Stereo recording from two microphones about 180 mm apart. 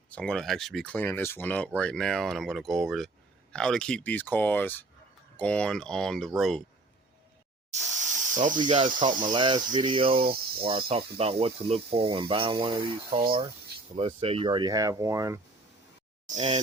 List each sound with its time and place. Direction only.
0.1 s speech: 5° left (ahead or behind)
8.3 s speech: 45° right (ahead or behind)
8.5 s speech: 25° right (ahead or behind)